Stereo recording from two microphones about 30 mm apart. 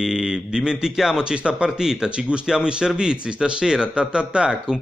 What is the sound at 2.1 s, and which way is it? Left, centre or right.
Speech, right.